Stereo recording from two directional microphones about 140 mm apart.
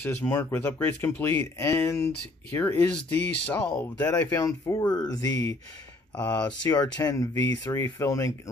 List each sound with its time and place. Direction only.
0.0 s speech: 15° left (ahead or behind)
4.0 s speech: 25° left (ahead or behind)